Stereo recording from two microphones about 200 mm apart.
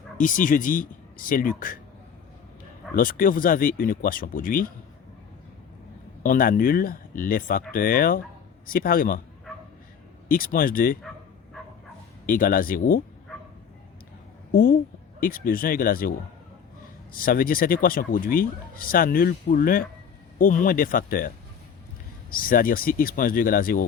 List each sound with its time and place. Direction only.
0.2 s speech: 40° left (ahead or behind)
2.9 s speech: 45° left (ahead or behind)
6.2 s speech: 45° left (ahead or behind)
10.2 s speech: 45° left (ahead or behind)
12.2 s speech: 45° left (ahead or behind)
13.3 s bow-wow: centre (ahead or behind)
14.5 s speech: 50° left (ahead or behind)